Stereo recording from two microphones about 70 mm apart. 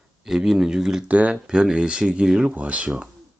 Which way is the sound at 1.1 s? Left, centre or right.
Right.